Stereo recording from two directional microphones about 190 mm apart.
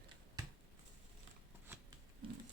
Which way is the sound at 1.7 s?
15° right (ahead or behind).